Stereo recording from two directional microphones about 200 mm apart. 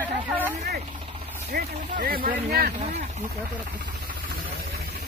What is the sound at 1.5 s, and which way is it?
Speech, 45° right (ahead or behind).